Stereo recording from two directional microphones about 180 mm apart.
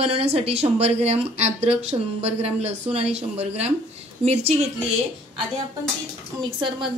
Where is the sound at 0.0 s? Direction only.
35° right (ahead or behind).